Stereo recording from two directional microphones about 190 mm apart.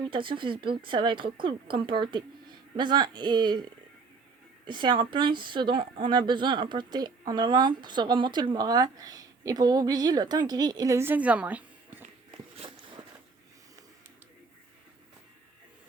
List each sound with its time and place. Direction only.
0.1 s speech: 25° right (ahead or behind)
4.6 s speech: 25° right (ahead or behind); by 12.0 s 10° right (ahead or behind)
12.5 s a sound: 25° right (ahead or behind)